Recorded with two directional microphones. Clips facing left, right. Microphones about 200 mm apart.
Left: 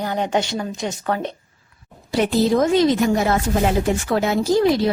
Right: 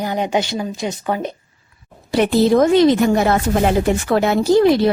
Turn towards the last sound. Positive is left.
turn(degrees=-60)  # may be behind; listen again after turning